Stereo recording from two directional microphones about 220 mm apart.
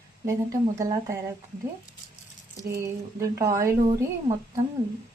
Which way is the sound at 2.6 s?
15° right (ahead or behind).